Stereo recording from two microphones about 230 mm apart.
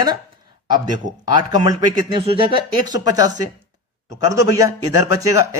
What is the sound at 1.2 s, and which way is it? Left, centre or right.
Speech, centre.